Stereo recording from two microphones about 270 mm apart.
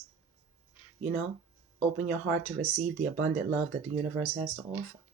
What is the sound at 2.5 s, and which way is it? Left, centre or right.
Speech, right.